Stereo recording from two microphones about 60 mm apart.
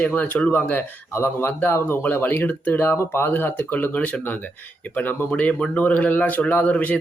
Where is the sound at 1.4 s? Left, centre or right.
Left.